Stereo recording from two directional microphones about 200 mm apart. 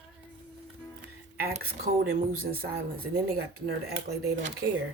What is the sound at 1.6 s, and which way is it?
Speech, 45° right (ahead or behind).